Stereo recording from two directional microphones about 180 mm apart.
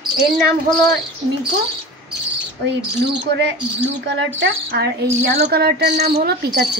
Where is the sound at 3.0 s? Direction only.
75° right (ahead or behind).